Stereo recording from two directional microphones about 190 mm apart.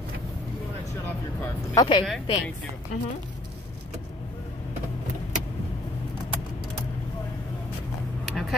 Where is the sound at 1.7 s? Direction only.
20° left (ahead or behind).